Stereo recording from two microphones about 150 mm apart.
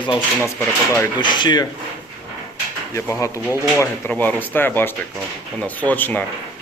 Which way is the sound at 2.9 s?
20° left (ahead or behind).